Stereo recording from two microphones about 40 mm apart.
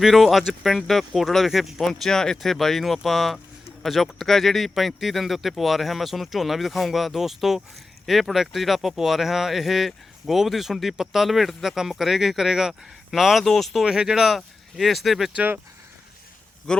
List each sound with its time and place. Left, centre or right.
0.0 s speech: centre
1.8 s speech: centre
13.4 s speech: centre
13.8 s speech: centre
14.1 s speech: centre
16.7 s a man's voice: centre